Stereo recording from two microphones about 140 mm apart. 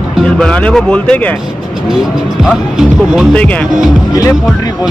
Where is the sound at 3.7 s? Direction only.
5° right (ahead or behind).